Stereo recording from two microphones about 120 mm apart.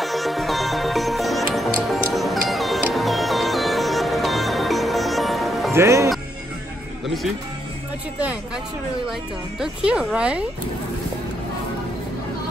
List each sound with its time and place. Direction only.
0.0 s music: centre (ahead or behind)
5.7 s speech: 25° right (ahead or behind)
9.6 s speech: 10° right (ahead or behind)